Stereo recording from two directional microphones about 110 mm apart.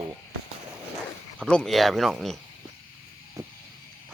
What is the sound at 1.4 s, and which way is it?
Speech, 5° left (ahead or behind).